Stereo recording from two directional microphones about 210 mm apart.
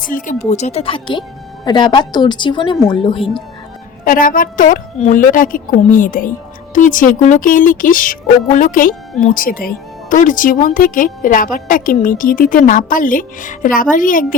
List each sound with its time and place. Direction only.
0.0 s speech: 40° left (ahead or behind); by 3.2 s 25° left (ahead or behind)
4.0 s speech: 40° left (ahead or behind)